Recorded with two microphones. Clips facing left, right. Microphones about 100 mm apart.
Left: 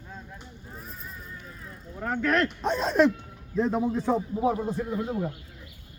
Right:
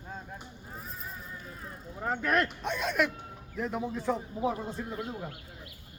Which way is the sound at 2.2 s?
10° right (ahead or behind).